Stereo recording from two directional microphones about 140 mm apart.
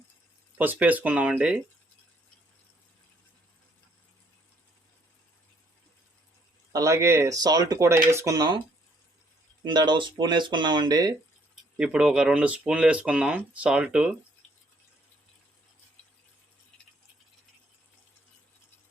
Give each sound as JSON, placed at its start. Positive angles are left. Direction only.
{"t": 0.6, "sound": "speech", "side_deg": -10}
{"t": 6.7, "sound": "speech", "side_deg": -20}
{"t": 9.6, "sound": "speech", "side_deg": -30}
{"t": 11.8, "sound": "speech", "side_deg": -10}